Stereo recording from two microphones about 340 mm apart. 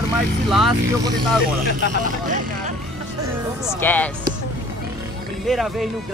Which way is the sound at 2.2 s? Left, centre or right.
Right.